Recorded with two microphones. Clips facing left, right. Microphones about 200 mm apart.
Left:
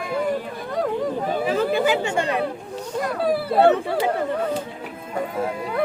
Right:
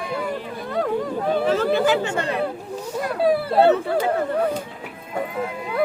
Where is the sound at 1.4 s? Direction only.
10° left (ahead or behind).